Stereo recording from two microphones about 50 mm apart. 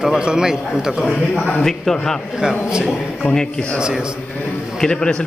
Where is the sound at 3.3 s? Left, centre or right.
Centre.